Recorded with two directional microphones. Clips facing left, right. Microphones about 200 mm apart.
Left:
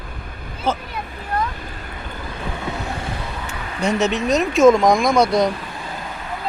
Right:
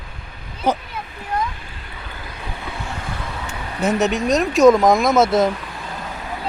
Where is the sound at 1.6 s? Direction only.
40° left (ahead or behind).